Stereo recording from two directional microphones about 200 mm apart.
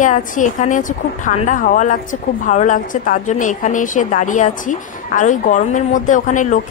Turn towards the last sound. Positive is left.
turn(degrees=40)  # may be behind; listen again after turning